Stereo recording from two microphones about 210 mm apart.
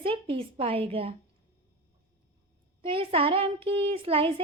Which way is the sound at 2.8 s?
25° right (ahead or behind).